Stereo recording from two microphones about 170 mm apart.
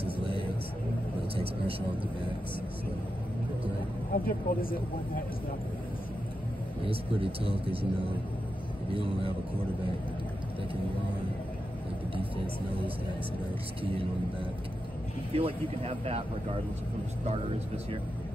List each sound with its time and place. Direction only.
0.0 s vehicle: 30° right (ahead or behind)
4.1 s speech: 55° left (ahead or behind)
6.9 s speech: 35° right (ahead or behind)
8.9 s speech: 30° right (ahead or behind)
15.3 s speech: 35° right (ahead or behind)